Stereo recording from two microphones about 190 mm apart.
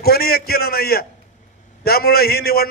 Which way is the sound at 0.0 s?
55° left (ahead or behind).